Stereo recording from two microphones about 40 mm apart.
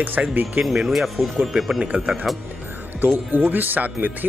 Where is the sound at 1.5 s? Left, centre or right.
Centre.